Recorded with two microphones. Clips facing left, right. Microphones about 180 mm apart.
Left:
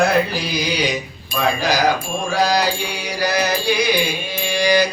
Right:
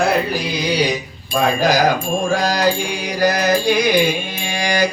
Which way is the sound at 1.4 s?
45° right (ahead or behind).